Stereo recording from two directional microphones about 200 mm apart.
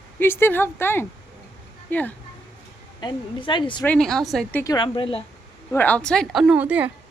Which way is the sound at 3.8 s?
5° left (ahead or behind).